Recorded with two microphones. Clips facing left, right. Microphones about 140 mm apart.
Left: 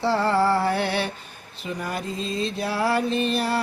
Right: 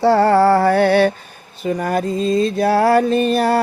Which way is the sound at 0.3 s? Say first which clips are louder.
Right 8 dB; 45° right (ahead or behind).